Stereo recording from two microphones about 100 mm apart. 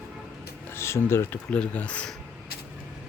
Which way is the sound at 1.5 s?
10° left (ahead or behind).